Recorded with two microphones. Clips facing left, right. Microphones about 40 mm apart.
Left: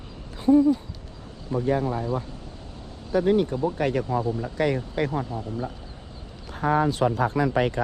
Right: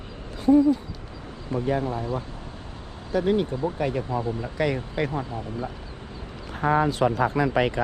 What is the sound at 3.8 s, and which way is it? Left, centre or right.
Speech, left.